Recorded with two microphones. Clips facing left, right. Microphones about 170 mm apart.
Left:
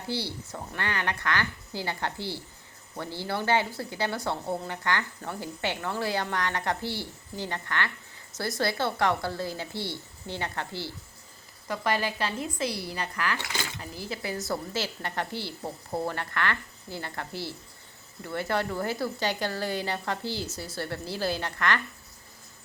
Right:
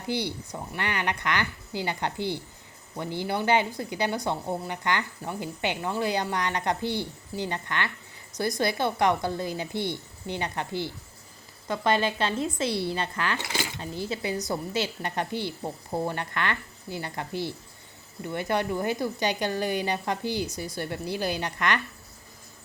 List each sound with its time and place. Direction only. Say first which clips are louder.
0.1 s speech: right 4 dB; 15° right (ahead or behind)